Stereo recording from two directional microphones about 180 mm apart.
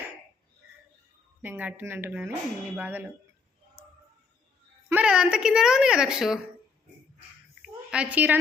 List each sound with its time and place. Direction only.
1.4 s speech: 10° right (ahead or behind)
4.9 s a woman's voice: 5° right (ahead or behind)
7.6 s a sound: 5° right (ahead or behind)